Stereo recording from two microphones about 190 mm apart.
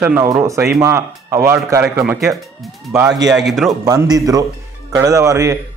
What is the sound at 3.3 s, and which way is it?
Speech, centre (ahead or behind).